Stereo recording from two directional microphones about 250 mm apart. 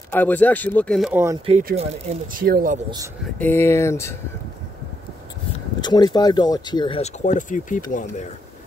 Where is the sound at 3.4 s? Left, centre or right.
Centre.